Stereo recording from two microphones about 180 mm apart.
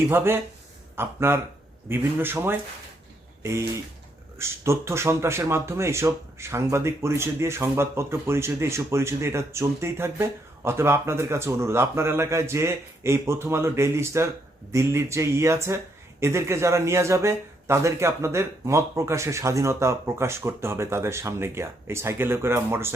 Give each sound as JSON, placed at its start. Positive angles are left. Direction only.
{"t": 0.1, "sound": "speech", "side_deg": -15}